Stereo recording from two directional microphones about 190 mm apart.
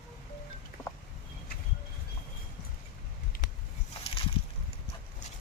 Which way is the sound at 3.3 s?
45° left (ahead or behind).